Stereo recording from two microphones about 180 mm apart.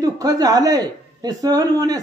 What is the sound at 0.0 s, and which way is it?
Speech, 20° right (ahead or behind).